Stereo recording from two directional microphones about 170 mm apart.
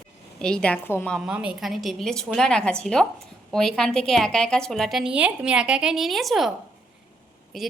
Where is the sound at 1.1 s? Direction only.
5° right (ahead or behind).